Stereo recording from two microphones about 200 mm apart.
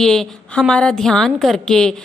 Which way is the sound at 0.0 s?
Centre (ahead or behind).